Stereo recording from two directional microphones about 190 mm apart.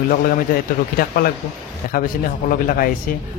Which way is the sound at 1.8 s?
50° left (ahead or behind).